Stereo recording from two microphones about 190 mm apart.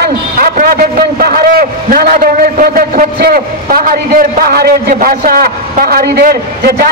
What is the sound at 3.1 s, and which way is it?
A man's voice, 55° right (ahead or behind).